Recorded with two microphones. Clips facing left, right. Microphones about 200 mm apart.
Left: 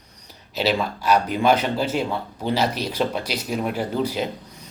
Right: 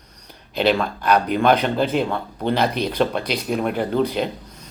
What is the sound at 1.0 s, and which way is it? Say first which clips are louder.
Speech: right 2 dB; 55° right (ahead or behind).